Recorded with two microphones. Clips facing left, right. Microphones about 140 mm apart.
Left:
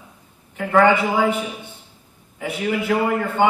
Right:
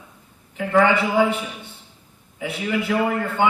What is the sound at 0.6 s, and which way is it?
Speech, 50° left (ahead or behind).